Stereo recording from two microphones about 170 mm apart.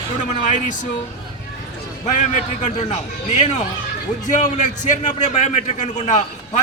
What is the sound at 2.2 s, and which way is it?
A man's voice, 45° left (ahead or behind).